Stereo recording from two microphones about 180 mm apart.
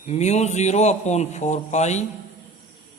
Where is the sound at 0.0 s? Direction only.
40° left (ahead or behind).